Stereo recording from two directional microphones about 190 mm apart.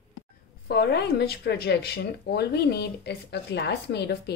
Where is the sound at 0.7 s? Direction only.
60° left (ahead or behind).